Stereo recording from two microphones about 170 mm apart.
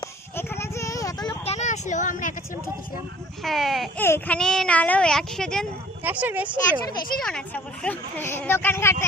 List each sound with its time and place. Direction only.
0.0 s a sound: 15° left (ahead or behind)
1.5 s a sound: 40° left (ahead or behind)
3.4 s a child's voice: centre (ahead or behind)
4.0 s a child's voice: 10° left (ahead or behind)
6.0 s speech: 10° right (ahead or behind)
7.2 s speech: 5° left (ahead or behind)